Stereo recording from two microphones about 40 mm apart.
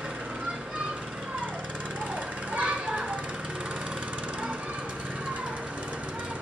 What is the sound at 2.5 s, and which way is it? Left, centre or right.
Children playing, right.